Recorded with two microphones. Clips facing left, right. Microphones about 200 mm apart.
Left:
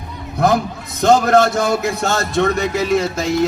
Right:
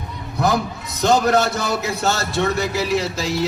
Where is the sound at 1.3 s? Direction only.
50° left (ahead or behind).